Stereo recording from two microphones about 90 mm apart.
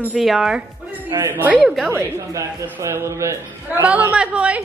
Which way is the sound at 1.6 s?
Centre (ahead or behind).